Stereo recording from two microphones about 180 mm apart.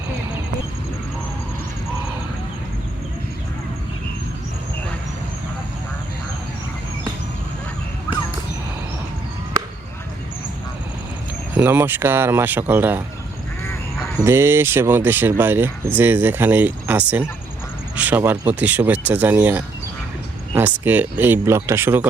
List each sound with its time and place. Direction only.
11.5 s speech: 10° right (ahead or behind)
14.2 s speech: 15° right (ahead or behind)